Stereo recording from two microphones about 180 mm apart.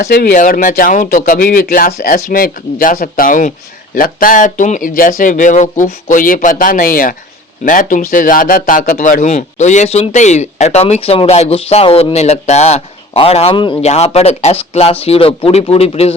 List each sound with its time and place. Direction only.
0.0 s speech: 65° left (ahead or behind)
0.3 s speech: 50° left (ahead or behind)